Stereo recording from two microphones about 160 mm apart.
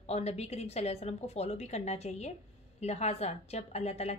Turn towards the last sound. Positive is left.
turn(degrees=40)  # may be behind; listen again after turning